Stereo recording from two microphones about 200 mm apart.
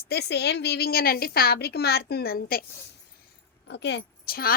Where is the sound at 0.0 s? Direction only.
55° left (ahead or behind).